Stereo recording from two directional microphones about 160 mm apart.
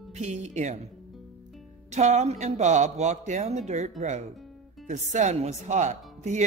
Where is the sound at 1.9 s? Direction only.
45° right (ahead or behind).